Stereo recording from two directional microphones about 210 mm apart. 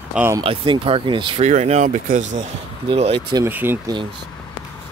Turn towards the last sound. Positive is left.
turn(degrees=-20)  # may be behind; listen again after turning